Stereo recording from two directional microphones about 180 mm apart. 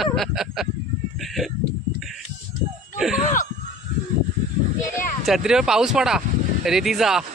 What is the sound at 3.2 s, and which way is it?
Speech, 45° left (ahead or behind).